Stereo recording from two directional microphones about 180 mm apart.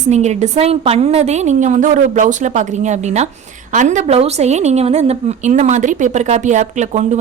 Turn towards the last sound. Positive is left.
turn(degrees=-40)  # may be behind; listen again after turning